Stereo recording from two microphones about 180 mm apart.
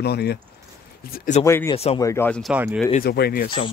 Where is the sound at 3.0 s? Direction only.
60° left (ahead or behind).